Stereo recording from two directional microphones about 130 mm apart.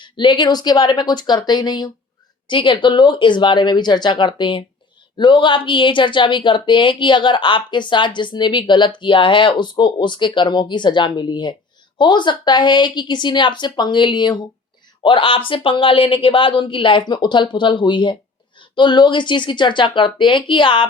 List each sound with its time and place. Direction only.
0.0 s speech: 35° left (ahead or behind)